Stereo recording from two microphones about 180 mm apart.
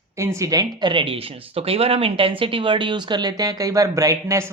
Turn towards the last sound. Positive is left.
turn(degrees=-15)  # may be behind; listen again after turning